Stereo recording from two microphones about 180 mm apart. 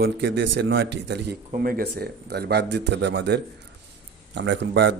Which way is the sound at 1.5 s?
55° right (ahead or behind).